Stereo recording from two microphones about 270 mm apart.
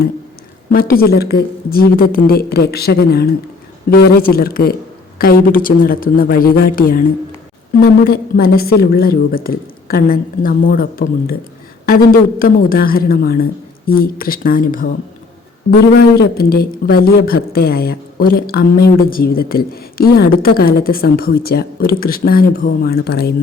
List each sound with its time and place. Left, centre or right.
0.7 s a woman's voice: left
16.0 s a woman's voice: left